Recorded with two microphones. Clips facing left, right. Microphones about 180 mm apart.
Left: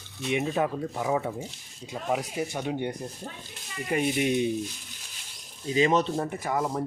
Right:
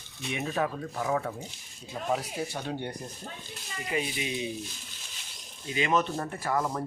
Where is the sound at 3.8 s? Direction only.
55° left (ahead or behind).